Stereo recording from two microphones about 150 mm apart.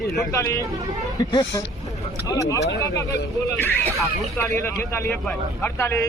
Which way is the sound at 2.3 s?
20° left (ahead or behind).